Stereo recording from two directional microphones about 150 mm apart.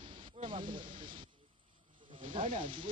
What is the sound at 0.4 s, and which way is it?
Snake, 35° right (ahead or behind).